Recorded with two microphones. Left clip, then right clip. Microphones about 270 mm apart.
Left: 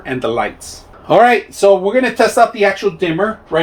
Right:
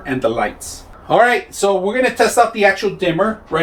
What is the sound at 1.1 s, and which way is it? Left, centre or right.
Speech, left.